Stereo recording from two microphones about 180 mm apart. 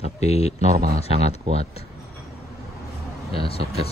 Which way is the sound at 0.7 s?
55° right (ahead or behind).